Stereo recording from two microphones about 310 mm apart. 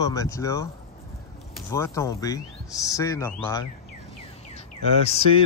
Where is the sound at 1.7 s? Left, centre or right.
Centre.